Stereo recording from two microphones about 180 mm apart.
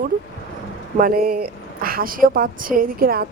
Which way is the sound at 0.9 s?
55° right (ahead or behind).